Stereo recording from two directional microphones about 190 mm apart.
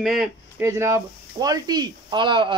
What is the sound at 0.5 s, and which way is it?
Speech, 15° right (ahead or behind).